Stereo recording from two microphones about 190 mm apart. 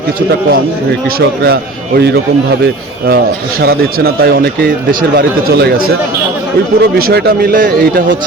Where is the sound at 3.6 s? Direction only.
55° right (ahead or behind).